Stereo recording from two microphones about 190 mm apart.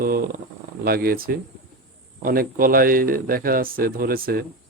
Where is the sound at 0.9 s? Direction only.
50° right (ahead or behind).